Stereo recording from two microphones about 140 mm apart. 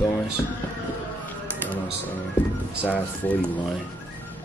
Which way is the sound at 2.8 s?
10° left (ahead or behind).